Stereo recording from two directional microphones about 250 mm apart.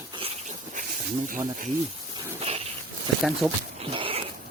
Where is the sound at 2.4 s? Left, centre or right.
Right.